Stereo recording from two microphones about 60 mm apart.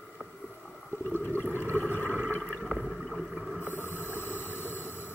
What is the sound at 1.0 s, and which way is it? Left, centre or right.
Water, left.